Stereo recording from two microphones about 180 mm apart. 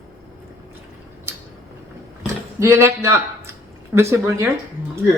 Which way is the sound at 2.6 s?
15° right (ahead or behind).